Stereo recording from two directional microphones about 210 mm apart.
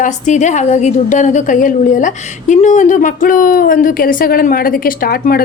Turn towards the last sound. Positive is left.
turn(degrees=45)  # may be behind; listen again after turning